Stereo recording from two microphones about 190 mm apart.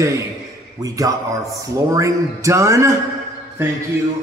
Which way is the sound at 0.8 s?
20° right (ahead or behind).